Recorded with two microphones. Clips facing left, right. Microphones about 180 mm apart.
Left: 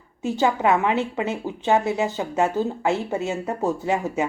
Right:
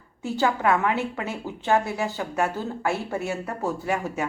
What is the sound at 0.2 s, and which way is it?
Speech, 20° left (ahead or behind).